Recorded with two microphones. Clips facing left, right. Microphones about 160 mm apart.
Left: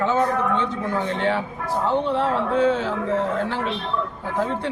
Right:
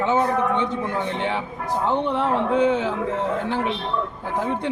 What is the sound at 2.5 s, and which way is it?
Speech, 20° right (ahead or behind).